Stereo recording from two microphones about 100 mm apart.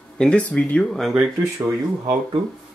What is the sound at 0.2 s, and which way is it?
Speech, 10° left (ahead or behind).